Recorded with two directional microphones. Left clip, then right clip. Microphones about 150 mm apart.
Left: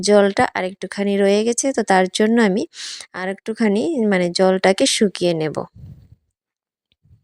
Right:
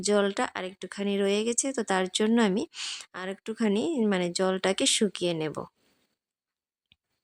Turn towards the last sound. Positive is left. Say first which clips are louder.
# left 10 dB
turn(degrees=40)  # may be behind; listen again after turning